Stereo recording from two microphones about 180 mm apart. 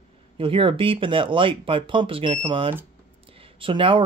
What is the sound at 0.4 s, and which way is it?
Speech, 30° right (ahead or behind).